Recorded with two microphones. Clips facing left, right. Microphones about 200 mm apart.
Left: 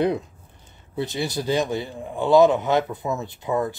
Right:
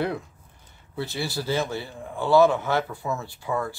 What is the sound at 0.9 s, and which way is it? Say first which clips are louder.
A man's voice: left 4 dB; 20° left (ahead or behind).